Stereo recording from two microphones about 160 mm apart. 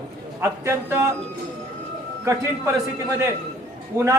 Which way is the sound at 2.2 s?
15° right (ahead or behind).